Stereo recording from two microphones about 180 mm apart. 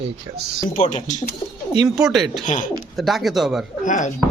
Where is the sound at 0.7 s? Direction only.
45° left (ahead or behind).